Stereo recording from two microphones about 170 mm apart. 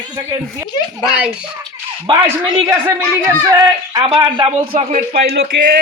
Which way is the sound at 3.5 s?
20° right (ahead or behind).